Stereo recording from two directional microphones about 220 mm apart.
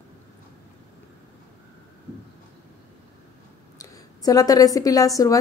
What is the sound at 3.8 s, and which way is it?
A woman's voice, 15° left (ahead or behind).